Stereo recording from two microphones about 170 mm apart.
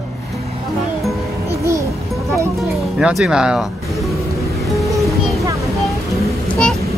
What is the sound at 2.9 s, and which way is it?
Speech, 5° right (ahead or behind).